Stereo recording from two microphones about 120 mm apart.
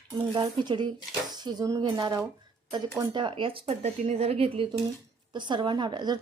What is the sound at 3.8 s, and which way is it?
Speech, 70° right (ahead or behind).